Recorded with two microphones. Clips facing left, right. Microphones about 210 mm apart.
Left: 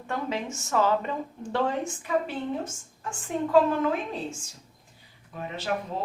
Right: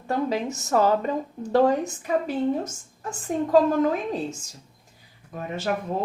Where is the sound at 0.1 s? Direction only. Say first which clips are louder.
Right 6 dB; 40° right (ahead or behind).